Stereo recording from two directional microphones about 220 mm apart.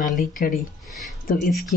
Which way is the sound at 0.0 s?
35° left (ahead or behind).